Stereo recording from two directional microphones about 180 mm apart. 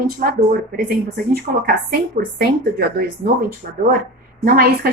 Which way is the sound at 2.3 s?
60° right (ahead or behind).